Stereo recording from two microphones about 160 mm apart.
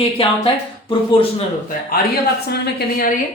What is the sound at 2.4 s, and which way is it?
Speech, 85° left.